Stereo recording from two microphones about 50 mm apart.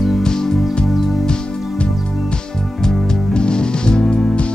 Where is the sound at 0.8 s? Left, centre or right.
Centre.